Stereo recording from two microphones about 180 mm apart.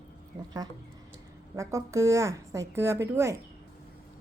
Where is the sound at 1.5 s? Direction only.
15° right (ahead or behind).